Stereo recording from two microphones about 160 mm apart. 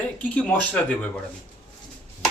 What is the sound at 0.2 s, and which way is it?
Speech, 10° left (ahead or behind).